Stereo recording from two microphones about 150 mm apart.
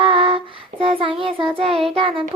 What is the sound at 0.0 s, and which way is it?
Child singing, 35° right (ahead or behind).